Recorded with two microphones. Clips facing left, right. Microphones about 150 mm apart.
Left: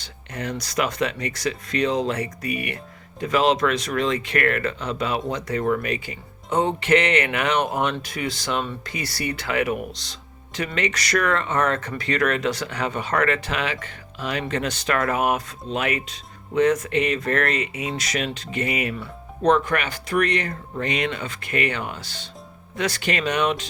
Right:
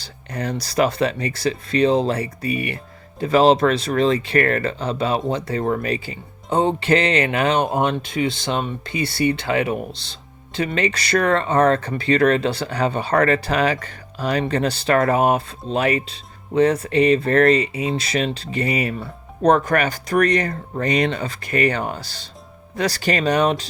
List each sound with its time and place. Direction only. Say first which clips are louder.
0.0 s speech: right 4 dB; 35° right (ahead or behind)